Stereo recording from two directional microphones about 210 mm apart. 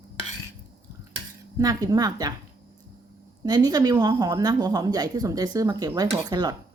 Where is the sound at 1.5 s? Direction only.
15° right (ahead or behind).